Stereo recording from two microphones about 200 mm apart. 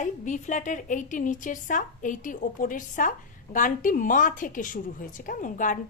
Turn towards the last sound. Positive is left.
turn(degrees=40)  # may be behind; listen again after turning